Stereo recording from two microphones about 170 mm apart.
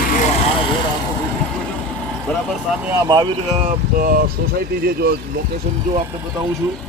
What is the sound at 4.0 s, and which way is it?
Speech, 60° right (ahead or behind).